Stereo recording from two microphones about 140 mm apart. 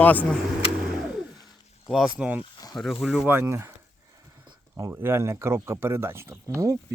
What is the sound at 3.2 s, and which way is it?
Speech, 15° right (ahead or behind).